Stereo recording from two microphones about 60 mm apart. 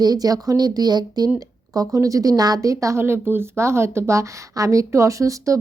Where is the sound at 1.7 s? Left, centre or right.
Right.